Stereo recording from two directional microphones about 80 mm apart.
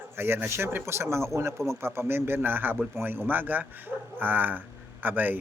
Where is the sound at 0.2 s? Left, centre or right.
Right.